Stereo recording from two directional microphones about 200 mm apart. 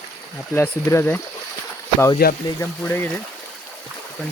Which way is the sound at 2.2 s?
50° left (ahead or behind).